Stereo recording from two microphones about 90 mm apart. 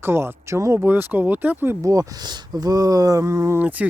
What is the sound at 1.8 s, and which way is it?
Speech, 40° right (ahead or behind).